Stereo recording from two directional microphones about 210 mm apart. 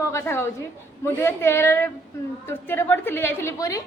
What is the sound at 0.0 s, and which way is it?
A woman's voice, 15° left (ahead or behind).